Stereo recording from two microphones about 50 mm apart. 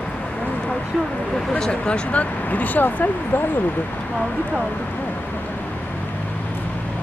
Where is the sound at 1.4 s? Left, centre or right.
Centre.